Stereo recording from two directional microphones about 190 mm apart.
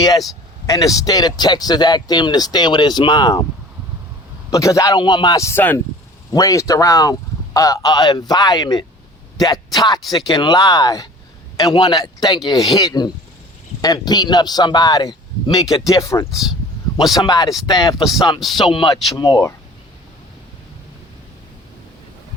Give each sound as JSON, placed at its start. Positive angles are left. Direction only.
{"t": 0.7, "sound": "speech", "side_deg": 15}
{"t": 4.5, "sound": "a man's voice", "side_deg": 15}
{"t": 17.9, "sound": "speech", "side_deg": 0}
{"t": 18.5, "sound": "speech", "side_deg": 25}